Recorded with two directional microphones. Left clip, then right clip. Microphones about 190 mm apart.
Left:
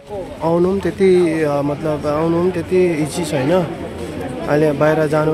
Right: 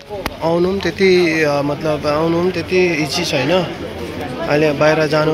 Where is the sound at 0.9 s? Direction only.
20° left (ahead or behind).